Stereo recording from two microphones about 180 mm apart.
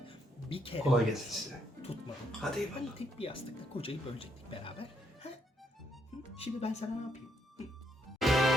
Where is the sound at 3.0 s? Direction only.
30° left (ahead or behind).